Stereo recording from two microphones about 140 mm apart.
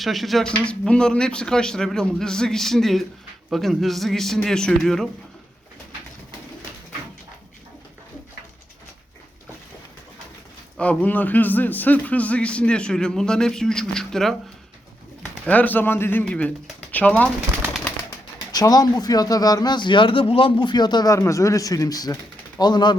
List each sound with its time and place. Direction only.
0.0 s speech: centre (ahead or behind)
10.8 s a man's voice: 10° left (ahead or behind)
15.4 s a man's voice: 10° left (ahead or behind)
18.5 s speech: 25° left (ahead or behind)